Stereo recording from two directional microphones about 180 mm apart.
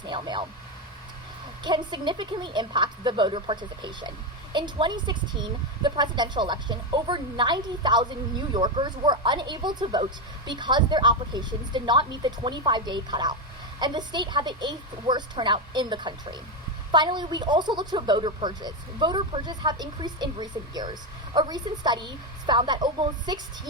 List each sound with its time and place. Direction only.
0.0 s speech: 25° right (ahead or behind)
1.6 s a woman's voice: 25° right (ahead or behind)